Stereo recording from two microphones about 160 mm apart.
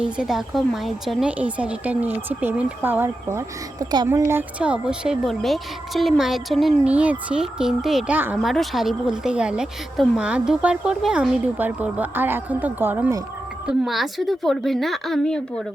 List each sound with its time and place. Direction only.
0.0 s a woman's voice: 5° right (ahead or behind)
13.7 s a woman's voice: centre (ahead or behind)